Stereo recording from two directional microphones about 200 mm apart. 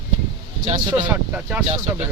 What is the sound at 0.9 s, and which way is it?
Speech, 10° right (ahead or behind).